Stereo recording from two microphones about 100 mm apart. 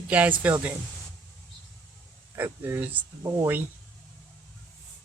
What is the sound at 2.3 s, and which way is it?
Speech, 20° right (ahead or behind).